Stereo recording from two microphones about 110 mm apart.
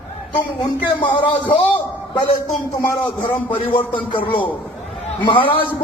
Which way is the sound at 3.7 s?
50° left (ahead or behind).